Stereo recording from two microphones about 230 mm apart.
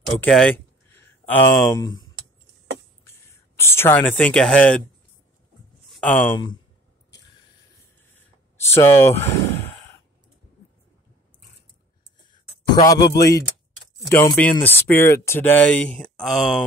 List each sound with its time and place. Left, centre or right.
0.2 s speech: centre
3.5 s speech: centre
5.9 s a sound: centre
8.5 s speech: centre
12.3 s a sound: centre
14.0 s speech: centre